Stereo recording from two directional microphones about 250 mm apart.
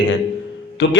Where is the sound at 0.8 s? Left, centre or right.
Left.